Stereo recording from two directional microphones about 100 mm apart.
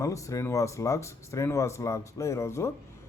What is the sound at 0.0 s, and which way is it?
A man's voice, 30° left (ahead or behind).